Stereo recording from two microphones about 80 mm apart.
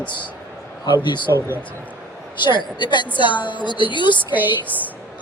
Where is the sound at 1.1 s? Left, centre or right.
Left.